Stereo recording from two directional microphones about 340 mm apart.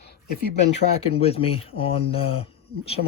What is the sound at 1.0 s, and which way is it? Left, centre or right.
Speech, centre.